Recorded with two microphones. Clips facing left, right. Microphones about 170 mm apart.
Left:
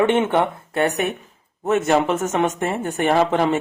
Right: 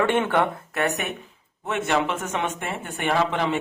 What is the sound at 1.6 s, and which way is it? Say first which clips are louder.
Speech: left 6 dB; 40° left (ahead or behind).